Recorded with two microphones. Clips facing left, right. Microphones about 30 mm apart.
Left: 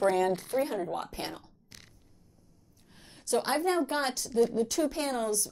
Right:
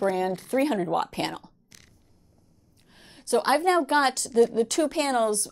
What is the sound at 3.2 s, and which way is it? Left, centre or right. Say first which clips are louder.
A woman's voice: right 6 dB; right.